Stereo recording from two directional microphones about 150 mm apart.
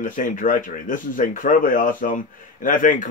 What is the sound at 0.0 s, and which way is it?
A man's voice, 60° left (ahead or behind).